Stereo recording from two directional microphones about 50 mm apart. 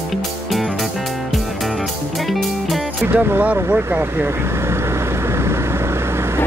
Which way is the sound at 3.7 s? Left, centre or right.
Right.